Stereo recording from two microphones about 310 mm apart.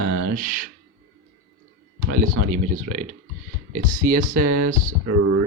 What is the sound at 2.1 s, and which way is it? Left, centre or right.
Speech, right.